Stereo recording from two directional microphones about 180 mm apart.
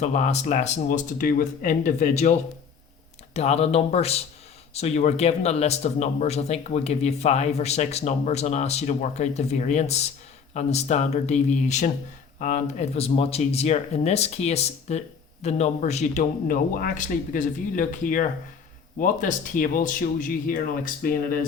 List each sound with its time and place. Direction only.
0.0 s speech: 40° left (ahead or behind)
3.3 s speech: 35° left (ahead or behind)